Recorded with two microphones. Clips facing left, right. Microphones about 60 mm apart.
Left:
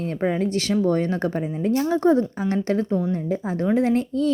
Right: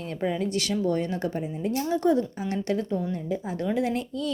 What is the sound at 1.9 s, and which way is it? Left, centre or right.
A woman's voice, left.